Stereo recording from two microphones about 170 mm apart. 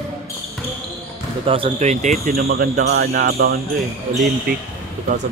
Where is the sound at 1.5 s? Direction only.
35° right (ahead or behind).